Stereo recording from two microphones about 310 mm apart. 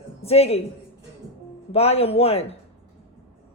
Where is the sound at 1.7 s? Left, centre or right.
Centre.